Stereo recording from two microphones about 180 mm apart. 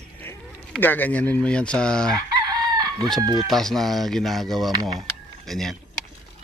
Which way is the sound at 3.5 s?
Centre (ahead or behind).